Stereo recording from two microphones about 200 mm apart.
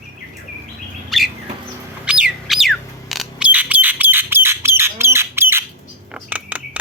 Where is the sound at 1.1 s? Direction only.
Centre (ahead or behind).